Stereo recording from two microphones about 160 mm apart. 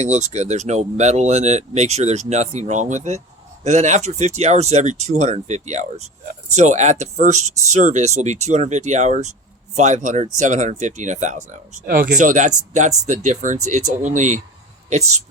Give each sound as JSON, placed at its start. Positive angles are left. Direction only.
{"t": 0.0, "sound": "speech", "side_deg": -45}